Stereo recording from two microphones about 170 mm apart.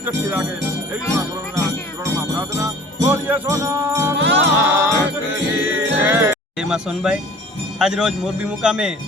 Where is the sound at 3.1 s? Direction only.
10° right (ahead or behind).